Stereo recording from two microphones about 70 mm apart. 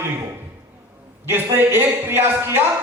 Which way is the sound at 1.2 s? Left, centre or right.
Right.